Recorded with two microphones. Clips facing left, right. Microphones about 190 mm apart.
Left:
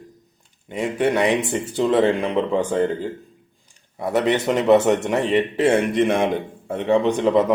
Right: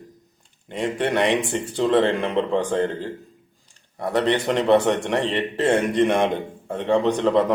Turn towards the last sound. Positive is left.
turn(degrees=5)  # may be behind; listen again after turning